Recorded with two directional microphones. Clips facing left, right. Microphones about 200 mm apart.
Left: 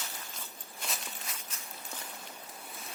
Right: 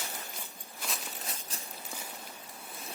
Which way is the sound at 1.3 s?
35° right (ahead or behind).